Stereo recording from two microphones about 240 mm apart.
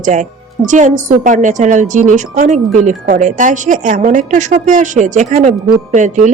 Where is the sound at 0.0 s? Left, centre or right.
Right.